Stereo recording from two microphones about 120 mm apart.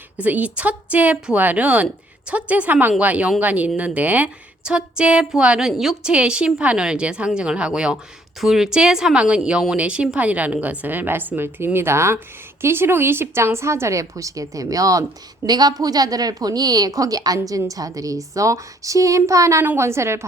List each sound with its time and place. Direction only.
0.2 s a woman's voice: 15° right (ahead or behind)